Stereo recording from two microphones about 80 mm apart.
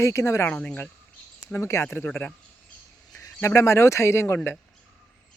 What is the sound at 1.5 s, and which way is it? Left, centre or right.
Speech, left.